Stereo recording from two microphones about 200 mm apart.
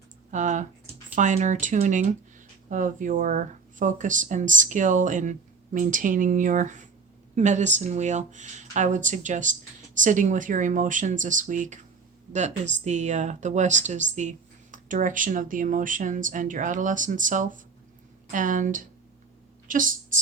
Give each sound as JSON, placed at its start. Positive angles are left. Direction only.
{"t": 0.3, "sound": "speech", "side_deg": -40}
{"t": 12.8, "sound": "a woman's voice", "side_deg": -35}